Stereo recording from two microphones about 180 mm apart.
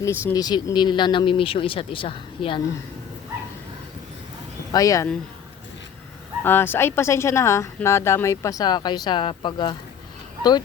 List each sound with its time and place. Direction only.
0.0 s speech: 15° left (ahead or behind)
4.7 s speech: 20° left (ahead or behind)
6.4 s speech: 10° left (ahead or behind)